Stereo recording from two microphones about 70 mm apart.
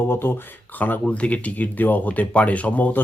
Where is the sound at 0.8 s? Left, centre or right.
Left.